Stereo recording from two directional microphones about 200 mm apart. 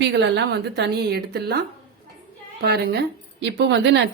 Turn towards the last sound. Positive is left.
turn(degrees=-60)  # may be behind; listen again after turning